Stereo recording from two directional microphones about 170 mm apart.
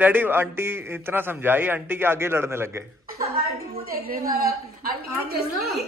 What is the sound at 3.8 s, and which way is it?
A woman's voice, 60° right (ahead or behind).